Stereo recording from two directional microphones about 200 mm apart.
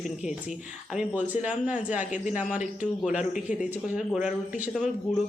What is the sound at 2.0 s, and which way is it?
Speech, 40° left (ahead or behind).